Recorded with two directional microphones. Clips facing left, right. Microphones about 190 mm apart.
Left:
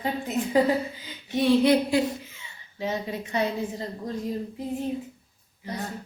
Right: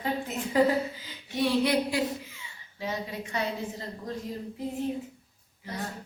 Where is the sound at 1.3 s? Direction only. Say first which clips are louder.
Left 5 dB; 25° left (ahead or behind).